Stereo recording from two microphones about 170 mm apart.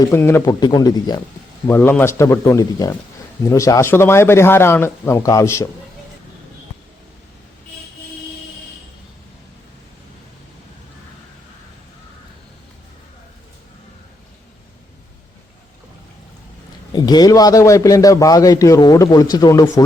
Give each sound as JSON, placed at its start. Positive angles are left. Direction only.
{"t": 0.1, "sound": "a man's voice", "side_deg": 15}
{"t": 1.6, "sound": "a man's voice", "side_deg": 15}
{"t": 16.9, "sound": "a man's voice", "side_deg": 25}